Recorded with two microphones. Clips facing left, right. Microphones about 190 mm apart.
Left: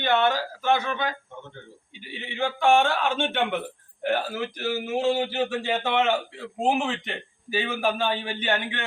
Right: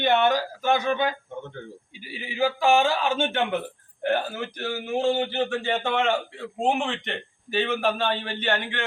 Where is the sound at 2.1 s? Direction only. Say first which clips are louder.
Right 3 dB; 5° right (ahead or behind).